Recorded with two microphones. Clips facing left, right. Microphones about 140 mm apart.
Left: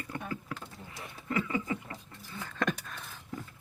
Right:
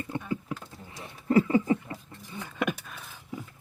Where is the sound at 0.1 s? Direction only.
20° right (ahead or behind).